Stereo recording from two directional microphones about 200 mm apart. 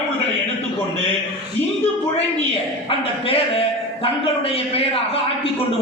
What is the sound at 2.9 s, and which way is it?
A man's voice, 30° left (ahead or behind).